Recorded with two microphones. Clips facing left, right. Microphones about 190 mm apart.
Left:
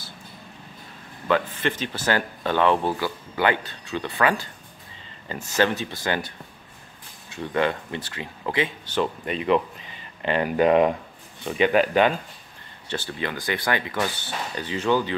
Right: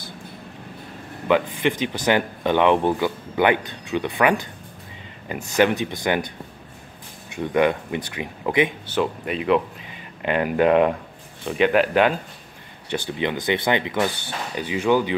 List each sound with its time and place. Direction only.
1.2 s speech: 15° right (ahead or behind)
8.9 s speech: 5° right (ahead or behind)
12.9 s speech: 15° right (ahead or behind)